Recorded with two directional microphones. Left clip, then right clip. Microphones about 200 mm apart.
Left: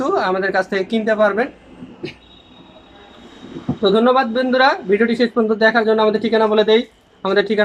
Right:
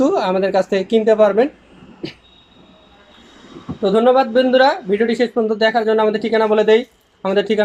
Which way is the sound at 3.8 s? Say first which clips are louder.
Right 1 dB; 5° right (ahead or behind).